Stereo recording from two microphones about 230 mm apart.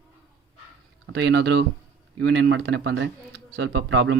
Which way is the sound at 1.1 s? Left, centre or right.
Right.